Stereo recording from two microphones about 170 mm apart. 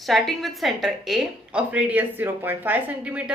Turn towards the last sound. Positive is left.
turn(degrees=-10)  # may be behind; listen again after turning